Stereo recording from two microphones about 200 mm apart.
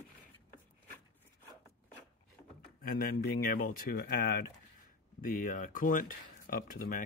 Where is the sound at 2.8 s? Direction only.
50° left (ahead or behind).